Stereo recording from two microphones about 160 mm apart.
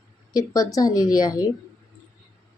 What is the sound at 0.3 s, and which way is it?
Speech, 20° left (ahead or behind).